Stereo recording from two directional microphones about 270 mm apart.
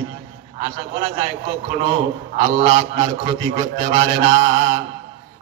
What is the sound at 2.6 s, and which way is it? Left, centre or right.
Speech, right.